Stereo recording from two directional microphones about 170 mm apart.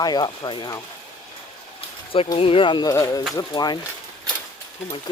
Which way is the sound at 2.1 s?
30° left (ahead or behind).